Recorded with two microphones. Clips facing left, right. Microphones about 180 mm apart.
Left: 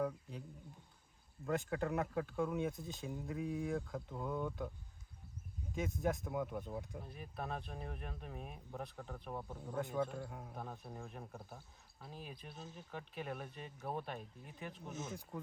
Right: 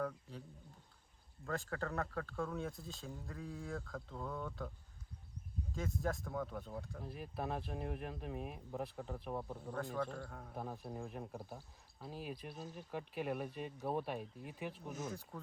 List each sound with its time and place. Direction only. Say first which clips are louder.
0.0 s speech: left 2 dB; 15° left (ahead or behind)
1.5 s speech: left 4 dB; 15° left (ahead or behind)
5.7 s speech: left 2 dB; 20° left (ahead or behind)
7.0 s speech: right 3 dB; centre (ahead or behind)
9.7 s speech: left 3 dB; 20° left (ahead or behind)
10.5 s speech: right 3 dB; 5° right (ahead or behind)
14.9 s speech: right 1 dB; 20° left (ahead or behind)